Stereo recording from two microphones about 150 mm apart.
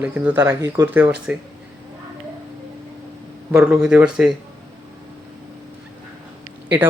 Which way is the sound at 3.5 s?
5° right (ahead or behind).